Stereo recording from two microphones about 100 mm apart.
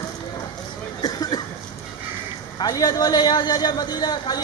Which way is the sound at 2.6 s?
40° left (ahead or behind).